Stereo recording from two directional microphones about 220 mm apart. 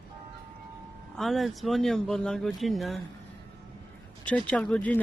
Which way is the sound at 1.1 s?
Centre (ahead or behind).